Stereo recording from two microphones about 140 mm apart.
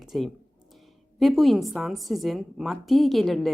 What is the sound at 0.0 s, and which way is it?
A woman's voice, centre (ahead or behind).